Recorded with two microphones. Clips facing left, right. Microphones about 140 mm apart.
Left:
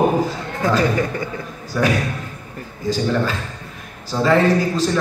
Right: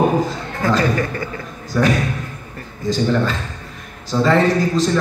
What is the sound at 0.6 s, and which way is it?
A man's voice, 15° left (ahead or behind).